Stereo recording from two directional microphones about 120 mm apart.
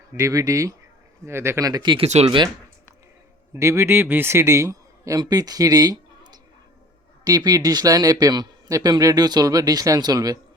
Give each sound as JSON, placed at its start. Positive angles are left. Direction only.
{"t": 0.2, "sound": "speech", "side_deg": -25}
{"t": 2.0, "sound": "speech", "side_deg": -65}
{"t": 3.5, "sound": "a man's voice", "side_deg": -25}